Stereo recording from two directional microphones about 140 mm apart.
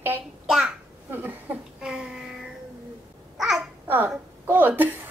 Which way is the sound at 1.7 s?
5° right (ahead or behind).